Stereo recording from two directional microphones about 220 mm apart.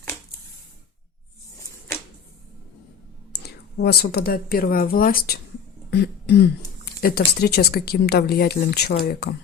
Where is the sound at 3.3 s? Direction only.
45° left (ahead or behind).